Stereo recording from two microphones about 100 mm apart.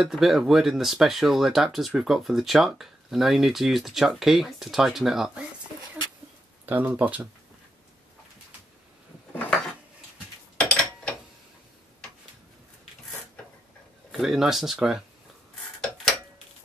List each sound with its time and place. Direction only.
0.0 s speech: centre (ahead or behind)
6.6 s speech: 15° right (ahead or behind)
10.6 s a sound: 10° left (ahead or behind)
14.2 s speech: 5° right (ahead or behind)